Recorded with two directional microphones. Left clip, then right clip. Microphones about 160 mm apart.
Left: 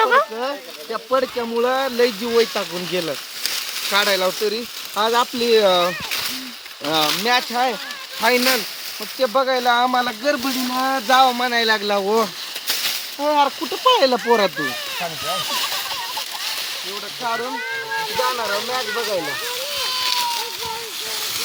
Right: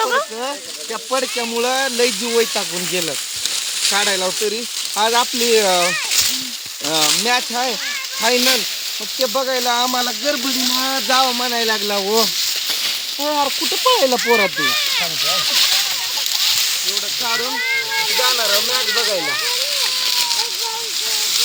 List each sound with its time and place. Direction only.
0.0 s a sound: 10° left (ahead or behind)
1.1 s speech: 15° right (ahead or behind)
9.2 s speech: 5° right (ahead or behind)
18.2 s speech: 15° left (ahead or behind)
18.9 s speech: 35° left (ahead or behind)